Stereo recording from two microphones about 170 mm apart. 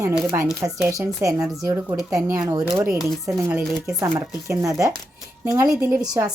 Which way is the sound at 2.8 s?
5° right (ahead or behind).